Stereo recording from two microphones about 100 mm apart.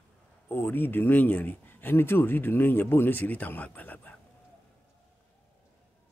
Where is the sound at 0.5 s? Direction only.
20° left (ahead or behind).